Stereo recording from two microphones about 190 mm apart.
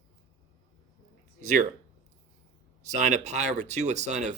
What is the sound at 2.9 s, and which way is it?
Speech, 40° right (ahead or behind).